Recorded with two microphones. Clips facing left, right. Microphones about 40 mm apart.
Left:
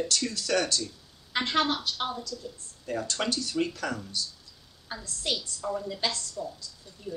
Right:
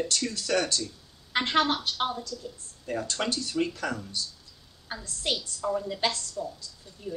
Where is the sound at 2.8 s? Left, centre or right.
Centre.